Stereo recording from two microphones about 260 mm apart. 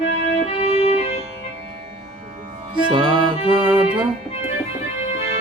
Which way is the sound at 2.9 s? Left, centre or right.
Centre.